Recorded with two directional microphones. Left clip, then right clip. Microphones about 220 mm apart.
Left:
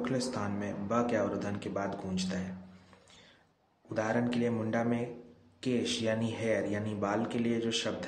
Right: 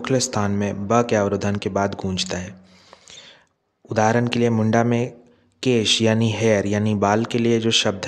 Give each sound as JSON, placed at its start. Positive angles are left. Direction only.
{"t": 0.0, "sound": "speech", "side_deg": -50}
{"t": 3.9, "sound": "speech", "side_deg": -50}